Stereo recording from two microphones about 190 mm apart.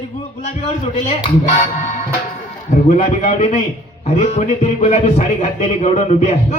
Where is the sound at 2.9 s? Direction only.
35° left (ahead or behind).